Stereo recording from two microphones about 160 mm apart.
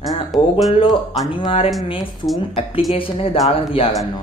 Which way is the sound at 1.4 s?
30° left (ahead or behind).